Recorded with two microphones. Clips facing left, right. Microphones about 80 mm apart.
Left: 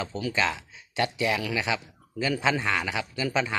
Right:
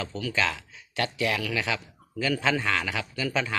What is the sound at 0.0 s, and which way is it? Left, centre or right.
Speech, left.